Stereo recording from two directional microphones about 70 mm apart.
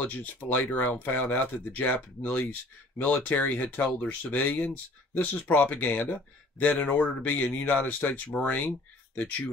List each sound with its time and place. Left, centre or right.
0.0 s speech: left